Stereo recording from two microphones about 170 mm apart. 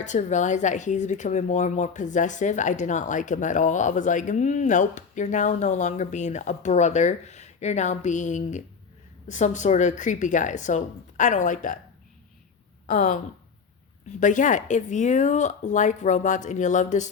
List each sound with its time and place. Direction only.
0.0 s speech: 45° left (ahead or behind)
12.9 s speech: 50° left (ahead or behind)
14.2 s speech: 50° left (ahead or behind)